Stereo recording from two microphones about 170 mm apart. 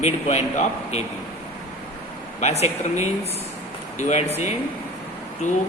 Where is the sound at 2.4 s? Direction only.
40° left (ahead or behind).